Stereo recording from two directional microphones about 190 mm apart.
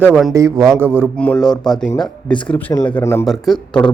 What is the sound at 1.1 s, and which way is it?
Speech, 5° left (ahead or behind).